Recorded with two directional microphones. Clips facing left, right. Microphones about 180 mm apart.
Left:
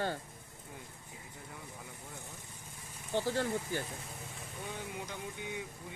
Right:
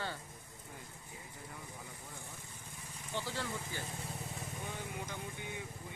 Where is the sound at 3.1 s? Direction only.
45° left (ahead or behind).